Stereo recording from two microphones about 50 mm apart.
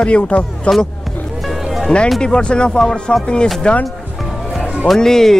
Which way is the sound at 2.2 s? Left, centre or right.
Centre.